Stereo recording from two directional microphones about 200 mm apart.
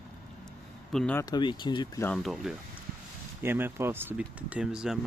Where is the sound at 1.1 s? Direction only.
20° left (ahead or behind).